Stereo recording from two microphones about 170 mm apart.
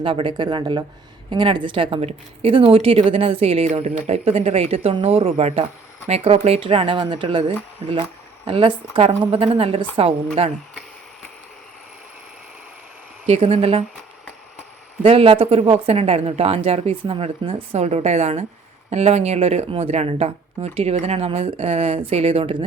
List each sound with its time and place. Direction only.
0.0 s a woman's voice: 30° right (ahead or behind)
8.4 s a woman's voice: 30° right (ahead or behind)
13.2 s a woman's voice: 35° right (ahead or behind)
15.0 s a woman's voice: 35° right (ahead or behind)